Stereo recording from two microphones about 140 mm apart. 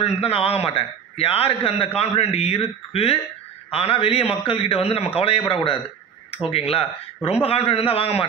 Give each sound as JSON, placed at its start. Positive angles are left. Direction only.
{"t": 0.0, "sound": "a man's voice", "side_deg": 45}